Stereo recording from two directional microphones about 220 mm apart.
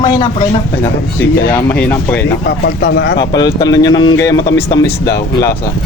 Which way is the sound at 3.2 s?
20° left (ahead or behind).